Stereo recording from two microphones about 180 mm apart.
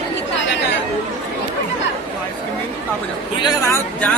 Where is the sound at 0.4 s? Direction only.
80° left.